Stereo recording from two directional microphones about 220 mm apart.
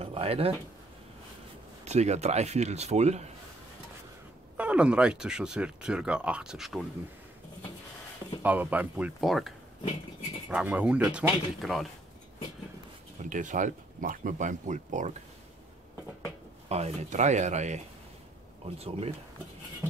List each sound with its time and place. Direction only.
0.0 s speech: 25° right (ahead or behind)
1.9 s speech: 30° right (ahead or behind)
4.6 s speech: 5° right (ahead or behind)
8.4 s speech: 10° right (ahead or behind)
10.5 s speech: 5° right (ahead or behind)
13.3 s speech: 35° right (ahead or behind)
16.6 s speech: 30° right (ahead or behind)